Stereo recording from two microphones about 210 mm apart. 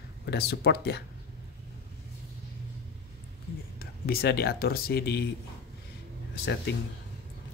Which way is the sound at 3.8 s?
45° left (ahead or behind).